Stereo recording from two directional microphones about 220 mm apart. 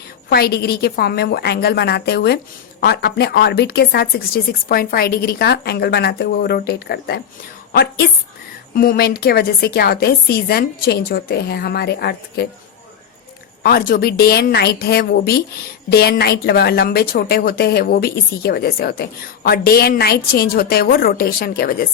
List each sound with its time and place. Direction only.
0.3 s a woman's voice: 45° left (ahead or behind)
13.6 s a woman's voice: 45° left (ahead or behind)